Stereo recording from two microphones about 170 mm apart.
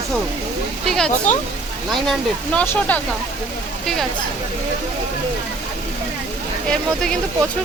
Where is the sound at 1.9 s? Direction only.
Centre (ahead or behind).